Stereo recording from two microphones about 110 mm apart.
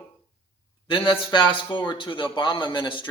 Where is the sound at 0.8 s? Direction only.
45° left (ahead or behind).